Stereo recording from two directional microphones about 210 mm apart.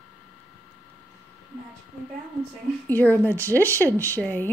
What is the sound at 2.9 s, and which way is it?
Speech, 10° left (ahead or behind).